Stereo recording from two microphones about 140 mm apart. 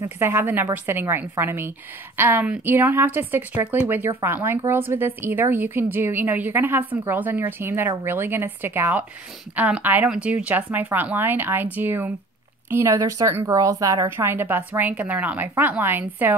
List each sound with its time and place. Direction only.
0.0 s a woman's voice: 15° right (ahead or behind)